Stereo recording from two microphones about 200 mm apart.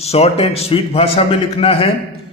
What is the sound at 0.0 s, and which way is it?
A man's voice, 30° left (ahead or behind).